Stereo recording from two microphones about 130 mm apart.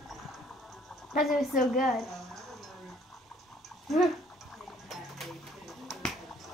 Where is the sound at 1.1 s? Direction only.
Centre (ahead or behind).